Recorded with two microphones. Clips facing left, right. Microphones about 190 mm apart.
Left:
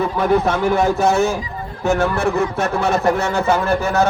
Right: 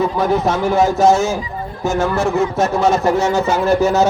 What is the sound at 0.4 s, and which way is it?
Speech, 60° left (ahead or behind).